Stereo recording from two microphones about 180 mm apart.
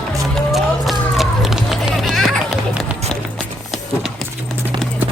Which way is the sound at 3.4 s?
Centre (ahead or behind).